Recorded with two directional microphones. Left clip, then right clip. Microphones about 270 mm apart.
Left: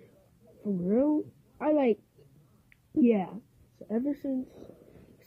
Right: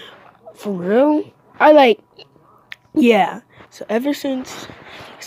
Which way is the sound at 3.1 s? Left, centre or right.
Centre.